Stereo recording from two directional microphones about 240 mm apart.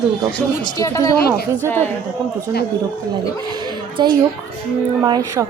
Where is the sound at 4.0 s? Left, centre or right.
Centre.